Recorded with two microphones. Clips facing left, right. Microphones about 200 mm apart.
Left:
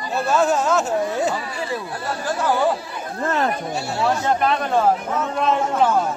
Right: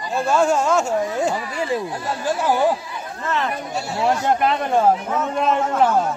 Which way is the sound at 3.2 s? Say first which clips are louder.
Left 3 dB; 45° left (ahead or behind).